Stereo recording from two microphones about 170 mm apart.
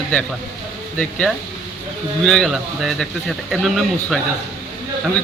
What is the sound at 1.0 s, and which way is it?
A man's voice, 5° left (ahead or behind).